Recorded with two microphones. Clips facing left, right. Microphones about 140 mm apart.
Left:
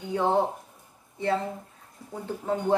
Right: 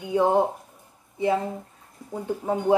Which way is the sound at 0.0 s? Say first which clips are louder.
Right 4 dB; 15° right (ahead or behind).